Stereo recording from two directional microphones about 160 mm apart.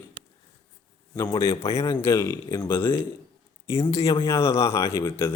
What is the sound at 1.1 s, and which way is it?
A man's voice, 20° left (ahead or behind).